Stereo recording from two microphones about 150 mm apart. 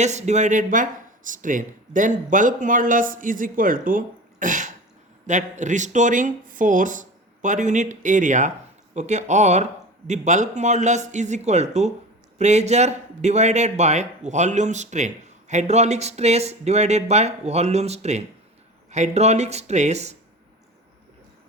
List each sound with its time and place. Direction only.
0.0 s a man's voice: 50° right (ahead or behind)